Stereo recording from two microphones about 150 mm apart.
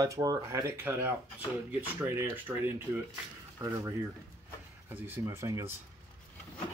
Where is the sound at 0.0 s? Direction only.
25° right (ahead or behind).